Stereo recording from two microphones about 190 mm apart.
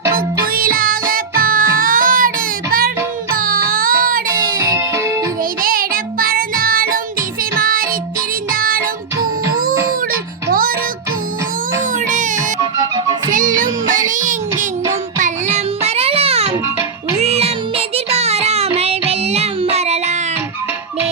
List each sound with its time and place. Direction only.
0.5 s music: 50° right (ahead or behind)
3.3 s music: 50° right (ahead or behind)
5.6 s child singing: 50° right (ahead or behind)
7.6 s music: 50° right (ahead or behind)
10.1 s music: 50° right (ahead or behind)
12.0 s music: 40° right (ahead or behind)
12.7 s music: 20° right (ahead or behind)
13.3 s music: 45° right (ahead or behind)
13.9 s child singing: 40° right (ahead or behind)
15.2 s music: 35° right (ahead or behind)
17.2 s child singing: 35° right (ahead or behind)